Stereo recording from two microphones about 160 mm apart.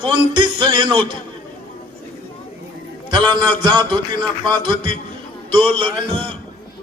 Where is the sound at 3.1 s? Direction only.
30° right (ahead or behind).